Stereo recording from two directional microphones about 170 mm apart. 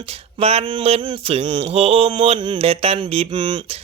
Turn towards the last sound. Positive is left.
turn(degrees=-30)  # may be behind; listen again after turning